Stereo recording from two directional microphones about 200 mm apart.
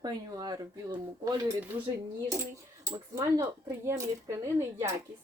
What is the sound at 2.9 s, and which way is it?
Speech, 15° right (ahead or behind).